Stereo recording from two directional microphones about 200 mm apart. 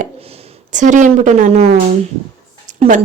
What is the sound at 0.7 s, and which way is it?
Speech, 40° right (ahead or behind).